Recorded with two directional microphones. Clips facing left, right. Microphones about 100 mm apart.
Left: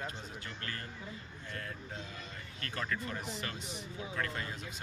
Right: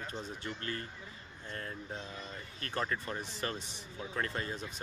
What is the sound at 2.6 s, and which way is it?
Speech, 30° right (ahead or behind).